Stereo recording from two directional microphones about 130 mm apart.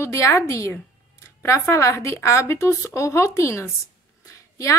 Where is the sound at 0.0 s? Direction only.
20° left (ahead or behind).